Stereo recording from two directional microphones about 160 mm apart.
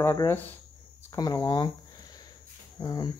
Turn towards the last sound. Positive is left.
turn(degrees=25)  # may be behind; listen again after turning